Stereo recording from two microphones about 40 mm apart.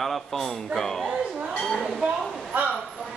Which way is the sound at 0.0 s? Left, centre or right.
Centre.